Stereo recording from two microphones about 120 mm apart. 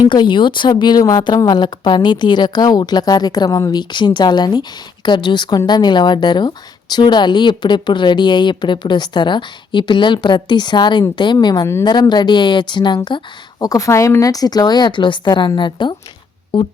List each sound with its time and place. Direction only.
0.1 s speech: 45° left (ahead or behind)